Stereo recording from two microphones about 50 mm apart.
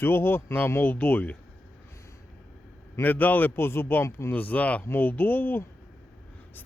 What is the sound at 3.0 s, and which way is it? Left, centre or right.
Speech, left.